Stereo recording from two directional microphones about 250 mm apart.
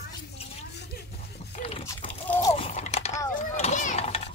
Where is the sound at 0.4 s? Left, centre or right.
Left.